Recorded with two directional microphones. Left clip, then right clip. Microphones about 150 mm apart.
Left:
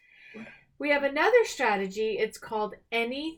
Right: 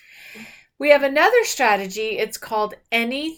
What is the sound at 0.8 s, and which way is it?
Speech, 20° right (ahead or behind).